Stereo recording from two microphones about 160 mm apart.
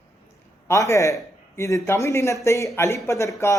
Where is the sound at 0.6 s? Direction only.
15° left (ahead or behind).